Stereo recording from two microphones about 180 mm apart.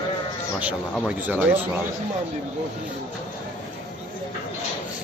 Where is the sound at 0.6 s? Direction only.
5° right (ahead or behind).